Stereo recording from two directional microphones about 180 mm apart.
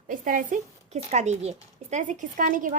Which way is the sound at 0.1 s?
45° right (ahead or behind).